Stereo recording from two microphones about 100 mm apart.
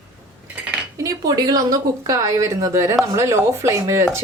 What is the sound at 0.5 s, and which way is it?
Cutlery, 15° right (ahead or behind).